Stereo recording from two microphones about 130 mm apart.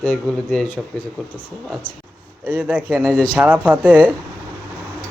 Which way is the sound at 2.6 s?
10° right (ahead or behind).